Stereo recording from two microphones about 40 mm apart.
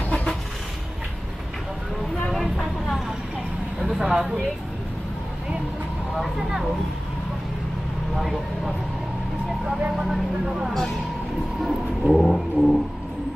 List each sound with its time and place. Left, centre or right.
0.1 s vehicle: left
2.2 s vehicle: centre
3.8 s a sound: centre
6.1 s speech: centre
8.2 s speech: centre
10.4 s speech: centre
12.0 s vehicle: centre
12.4 s a sound: centre